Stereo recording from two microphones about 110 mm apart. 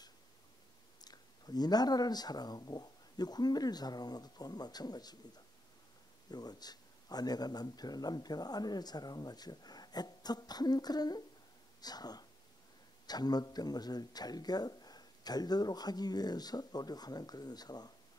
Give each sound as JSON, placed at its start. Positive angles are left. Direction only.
{"t": 1.0, "sound": "speech", "side_deg": 35}